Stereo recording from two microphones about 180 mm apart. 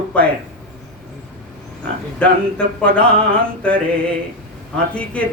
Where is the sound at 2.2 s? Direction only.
5° left (ahead or behind).